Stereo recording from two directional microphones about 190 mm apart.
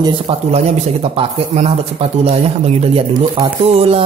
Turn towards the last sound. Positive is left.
turn(degrees=-30)  # may be behind; listen again after turning